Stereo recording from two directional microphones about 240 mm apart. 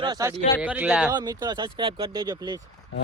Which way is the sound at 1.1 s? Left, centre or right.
Centre.